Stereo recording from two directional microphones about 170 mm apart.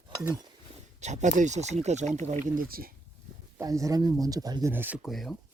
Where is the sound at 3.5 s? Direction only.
20° right (ahead or behind); by 5.3 s centre (ahead or behind).